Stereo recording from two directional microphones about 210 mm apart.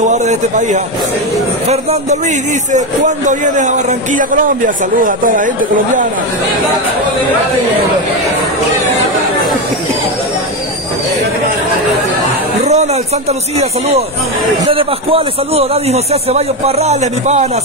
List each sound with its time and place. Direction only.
0.0 s a man's voice: 35° right (ahead or behind)
12.6 s a man's voice: 30° right (ahead or behind)